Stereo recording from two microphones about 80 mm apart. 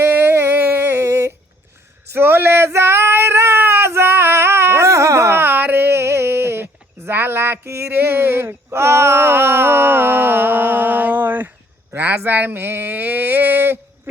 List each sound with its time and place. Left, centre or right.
0.0 s a sound: right
2.1 s female singing: right
7.9 s speech: right